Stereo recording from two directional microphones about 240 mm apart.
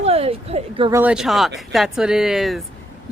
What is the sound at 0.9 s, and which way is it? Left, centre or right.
Speech, centre.